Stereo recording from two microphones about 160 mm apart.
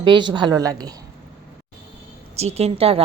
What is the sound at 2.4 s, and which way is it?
Speech, 40° right (ahead or behind).